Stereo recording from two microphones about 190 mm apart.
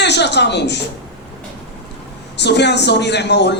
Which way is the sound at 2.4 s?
65° left (ahead or behind).